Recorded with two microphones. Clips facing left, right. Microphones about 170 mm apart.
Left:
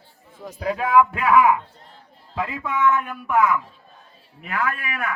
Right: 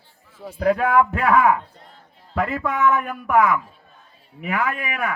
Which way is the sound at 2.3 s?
65° right (ahead or behind).